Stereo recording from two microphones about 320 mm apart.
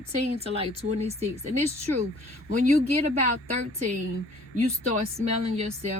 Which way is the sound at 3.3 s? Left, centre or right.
Right.